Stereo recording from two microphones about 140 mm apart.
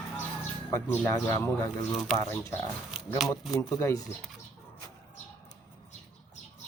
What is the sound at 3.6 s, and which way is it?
Speech, 20° left (ahead or behind).